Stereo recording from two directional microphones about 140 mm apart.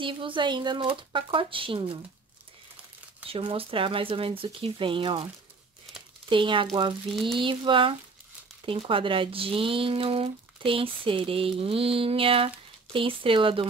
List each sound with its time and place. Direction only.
0.0 s speech: 35° right (ahead or behind)
3.3 s speech: 40° right (ahead or behind)
7.1 s speech: centre (ahead or behind)
7.3 s speech: 35° right (ahead or behind)